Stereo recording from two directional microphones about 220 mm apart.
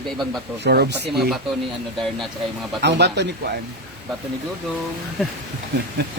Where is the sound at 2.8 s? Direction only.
50° right (ahead or behind).